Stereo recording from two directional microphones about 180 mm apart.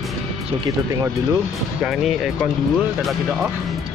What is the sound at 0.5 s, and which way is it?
Speech, 30° right (ahead or behind).